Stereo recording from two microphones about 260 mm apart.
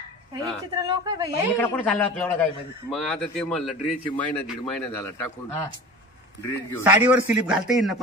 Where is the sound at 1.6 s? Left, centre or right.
Centre.